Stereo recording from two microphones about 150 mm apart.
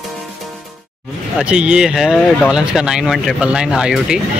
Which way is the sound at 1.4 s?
5° right (ahead or behind).